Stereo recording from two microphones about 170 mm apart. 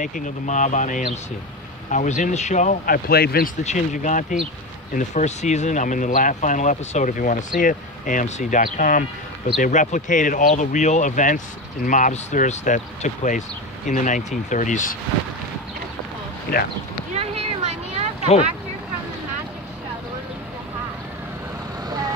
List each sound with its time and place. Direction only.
0.0 s speech: 50° left (ahead or behind); by 3.5 s 65° left (ahead or behind)
3.6 s speech: 45° left (ahead or behind)
16.5 s speech: 65° left (ahead or behind)
17.1 s a sound: 40° right (ahead or behind)
21.8 s vehicle: 20° right (ahead or behind)